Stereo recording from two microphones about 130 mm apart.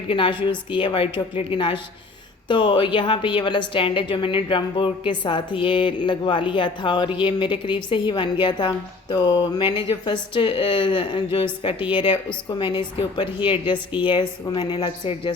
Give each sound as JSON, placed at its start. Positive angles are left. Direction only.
{"t": 0.1, "sound": "a woman's voice", "side_deg": 40}